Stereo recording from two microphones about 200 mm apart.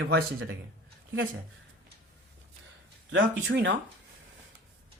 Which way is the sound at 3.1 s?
65° right (ahead or behind).